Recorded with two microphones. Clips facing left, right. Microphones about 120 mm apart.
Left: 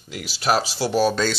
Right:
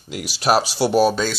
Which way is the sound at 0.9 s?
5° right (ahead or behind).